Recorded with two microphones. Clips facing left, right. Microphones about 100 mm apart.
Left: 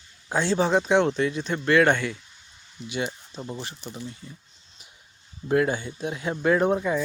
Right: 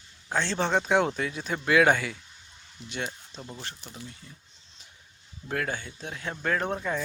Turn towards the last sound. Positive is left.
turn(degrees=10)  # may be behind; listen again after turning